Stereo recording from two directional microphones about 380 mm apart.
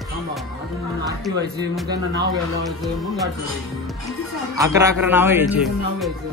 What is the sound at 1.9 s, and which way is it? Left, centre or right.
Speech, right.